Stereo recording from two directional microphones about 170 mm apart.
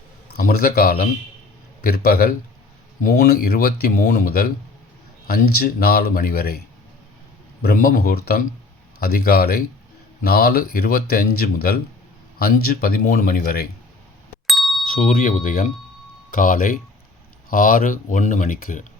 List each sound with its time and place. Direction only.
0.3 s speech: 60° left (ahead or behind)
7.6 s speech: 60° left (ahead or behind)
14.4 s a sound: centre (ahead or behind)
14.9 s speech: 50° left (ahead or behind)